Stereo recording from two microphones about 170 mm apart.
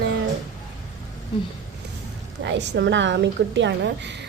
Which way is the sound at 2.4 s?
90° right.